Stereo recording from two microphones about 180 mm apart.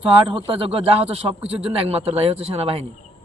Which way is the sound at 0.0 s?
30° right (ahead or behind).